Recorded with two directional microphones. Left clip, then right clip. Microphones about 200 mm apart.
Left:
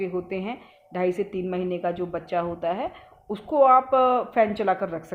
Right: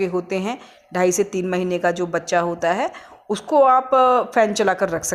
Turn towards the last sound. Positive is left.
turn(degrees=-30)  # may be behind; listen again after turning